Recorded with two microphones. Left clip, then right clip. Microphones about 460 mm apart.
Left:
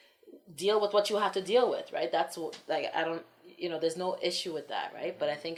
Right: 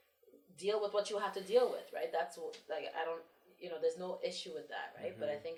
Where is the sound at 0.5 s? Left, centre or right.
Left.